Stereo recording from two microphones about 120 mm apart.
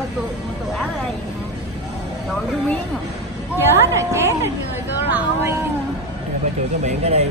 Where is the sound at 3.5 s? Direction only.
20° right (ahead or behind).